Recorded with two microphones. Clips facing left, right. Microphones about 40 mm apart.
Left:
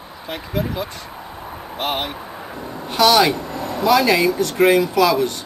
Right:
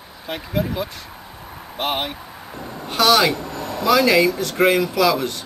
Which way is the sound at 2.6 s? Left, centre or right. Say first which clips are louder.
Left 3 dB; centre.